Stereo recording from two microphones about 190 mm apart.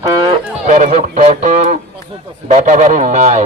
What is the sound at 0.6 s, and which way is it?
Speech, 40° right (ahead or behind).